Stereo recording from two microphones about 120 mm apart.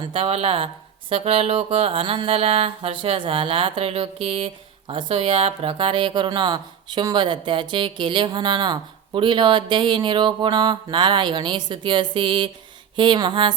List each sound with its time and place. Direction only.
0.0 s mantra: 50° right (ahead or behind)
13.0 s speech: 40° right (ahead or behind)